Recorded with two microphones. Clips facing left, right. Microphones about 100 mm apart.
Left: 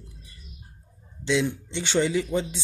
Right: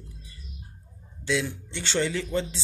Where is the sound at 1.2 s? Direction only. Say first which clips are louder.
Left 3 dB; 20° left (ahead or behind).